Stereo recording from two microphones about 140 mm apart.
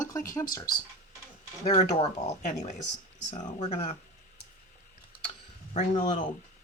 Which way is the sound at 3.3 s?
45° left (ahead or behind).